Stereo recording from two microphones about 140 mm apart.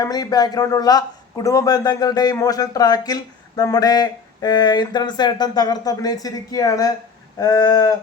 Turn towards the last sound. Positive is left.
turn(degrees=25)  # may be behind; listen again after turning